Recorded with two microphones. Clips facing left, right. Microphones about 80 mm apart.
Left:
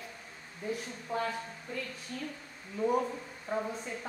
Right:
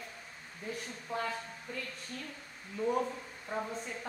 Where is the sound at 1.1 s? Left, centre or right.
Centre.